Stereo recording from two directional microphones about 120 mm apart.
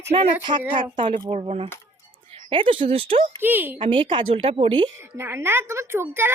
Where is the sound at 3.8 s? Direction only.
45° right (ahead or behind).